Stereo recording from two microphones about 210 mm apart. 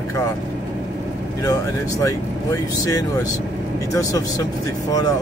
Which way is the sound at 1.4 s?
15° left (ahead or behind).